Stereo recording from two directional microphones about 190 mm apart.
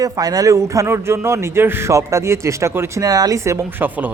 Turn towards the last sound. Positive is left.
turn(degrees=-10)  # may be behind; listen again after turning